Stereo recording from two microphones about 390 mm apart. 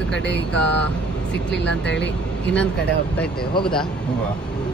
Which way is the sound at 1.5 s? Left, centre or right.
Left.